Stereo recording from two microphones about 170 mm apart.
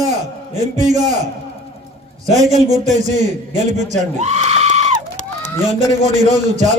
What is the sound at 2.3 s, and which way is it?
A man's voice, 40° right (ahead or behind).